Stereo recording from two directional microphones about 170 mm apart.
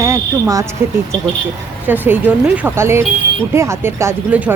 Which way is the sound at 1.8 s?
10° right (ahead or behind).